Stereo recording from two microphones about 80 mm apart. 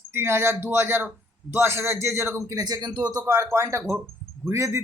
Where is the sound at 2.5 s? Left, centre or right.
Right.